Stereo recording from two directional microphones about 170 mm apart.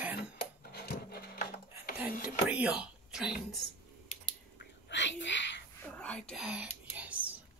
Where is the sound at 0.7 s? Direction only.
70° left (ahead or behind).